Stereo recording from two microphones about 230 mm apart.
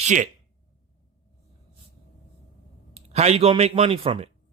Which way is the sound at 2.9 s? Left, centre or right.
Right.